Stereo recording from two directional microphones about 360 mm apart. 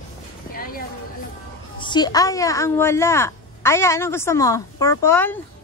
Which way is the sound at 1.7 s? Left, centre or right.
Centre.